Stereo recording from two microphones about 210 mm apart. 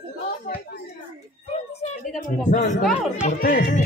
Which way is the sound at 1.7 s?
30° left (ahead or behind).